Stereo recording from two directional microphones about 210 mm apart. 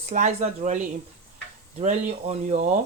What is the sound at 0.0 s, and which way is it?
Speech, 35° right (ahead or behind).